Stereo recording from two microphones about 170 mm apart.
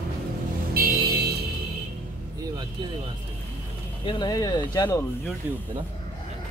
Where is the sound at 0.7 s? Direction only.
60° right (ahead or behind).